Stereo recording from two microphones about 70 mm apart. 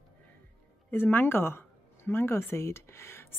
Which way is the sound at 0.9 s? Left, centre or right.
Left.